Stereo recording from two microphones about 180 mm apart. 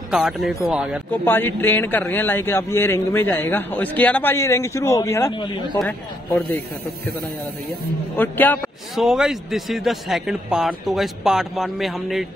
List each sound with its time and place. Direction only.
0.1 s speech: centre (ahead or behind)
1.1 s a man's voice: 10° left (ahead or behind)
5.3 s speech: 25° left (ahead or behind)
8.2 s a man's voice: 10° left (ahead or behind)
8.9 s speech: centre (ahead or behind)